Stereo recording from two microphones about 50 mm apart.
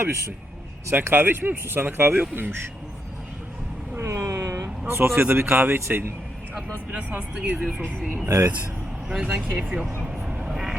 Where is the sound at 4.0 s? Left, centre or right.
Right.